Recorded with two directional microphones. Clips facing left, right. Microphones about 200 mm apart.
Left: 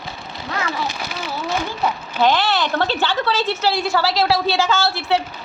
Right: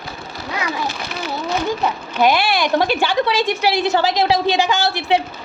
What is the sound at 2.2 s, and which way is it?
A woman's voice, 10° right (ahead or behind).